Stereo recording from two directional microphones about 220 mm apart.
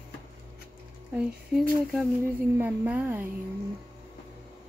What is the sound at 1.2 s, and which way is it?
Speech, centre (ahead or behind).